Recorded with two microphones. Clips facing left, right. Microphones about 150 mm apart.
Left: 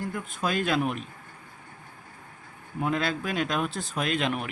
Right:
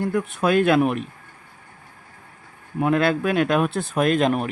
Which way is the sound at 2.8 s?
60° right (ahead or behind).